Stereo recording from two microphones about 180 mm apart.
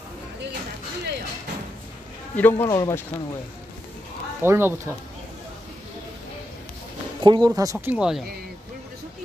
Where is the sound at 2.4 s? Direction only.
10° left (ahead or behind).